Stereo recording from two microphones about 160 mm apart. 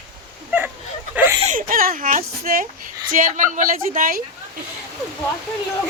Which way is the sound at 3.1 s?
55° right (ahead or behind).